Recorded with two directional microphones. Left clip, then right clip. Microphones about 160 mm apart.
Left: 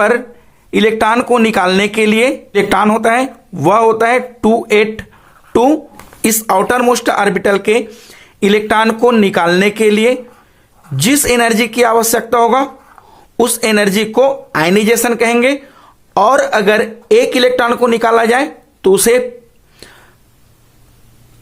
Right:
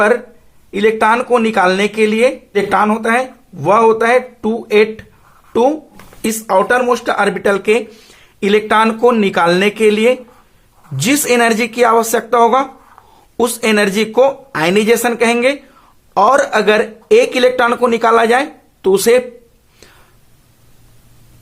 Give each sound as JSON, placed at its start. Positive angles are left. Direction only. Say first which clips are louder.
{"t": 0.7, "sound": "speech", "louder": "left 1 dB", "side_deg": 35}
{"t": 19.8, "sound": "whispering", "louder": "left 6 dB", "side_deg": 25}